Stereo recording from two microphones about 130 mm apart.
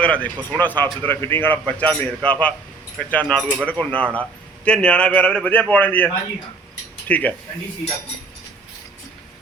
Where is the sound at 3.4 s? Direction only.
10° right (ahead or behind).